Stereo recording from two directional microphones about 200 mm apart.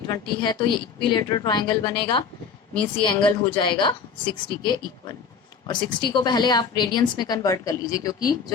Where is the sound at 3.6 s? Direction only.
25° left (ahead or behind).